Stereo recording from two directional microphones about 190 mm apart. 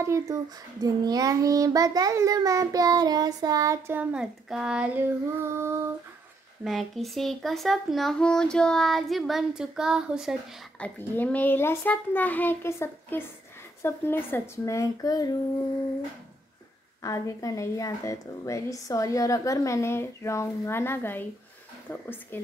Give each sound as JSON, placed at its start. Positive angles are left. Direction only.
{"t": 0.0, "sound": "child singing", "side_deg": -15}
{"t": 6.6, "sound": "a child's voice", "side_deg": 0}
{"t": 10.8, "sound": "speech", "side_deg": 10}
{"t": 17.0, "sound": "speech", "side_deg": 20}